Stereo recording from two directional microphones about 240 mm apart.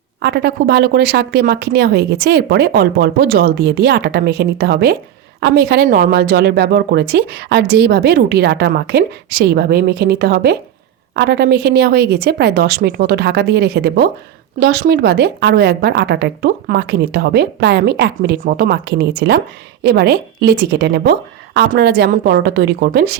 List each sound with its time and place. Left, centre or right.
0.2 s speech: right